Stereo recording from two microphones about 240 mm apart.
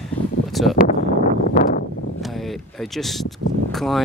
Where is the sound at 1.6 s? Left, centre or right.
Left.